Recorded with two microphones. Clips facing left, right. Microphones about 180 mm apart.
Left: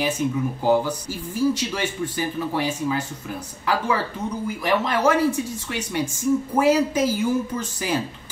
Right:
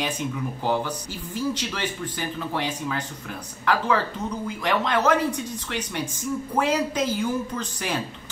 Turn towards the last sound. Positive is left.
turn(degrees=5)  # may be behind; listen again after turning